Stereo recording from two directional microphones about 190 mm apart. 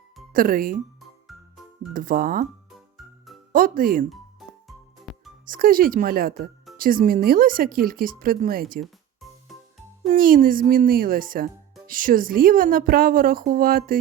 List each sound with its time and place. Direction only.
0.3 s speech: 45° right (ahead or behind)
0.9 s music: centre (ahead or behind)
1.9 s speech: 45° right (ahead or behind)
3.5 s speech: 45° right (ahead or behind)
5.1 s music: centre (ahead or behind)
5.5 s speech: 50° right (ahead or behind)
8.8 s music: centre (ahead or behind)
10.1 s speech: 45° right (ahead or behind)